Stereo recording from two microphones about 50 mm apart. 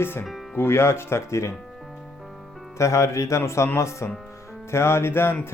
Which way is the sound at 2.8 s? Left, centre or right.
Left.